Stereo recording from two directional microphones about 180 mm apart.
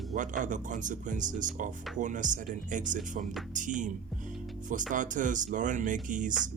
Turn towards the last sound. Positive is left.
turn(degrees=-45)  # may be behind; listen again after turning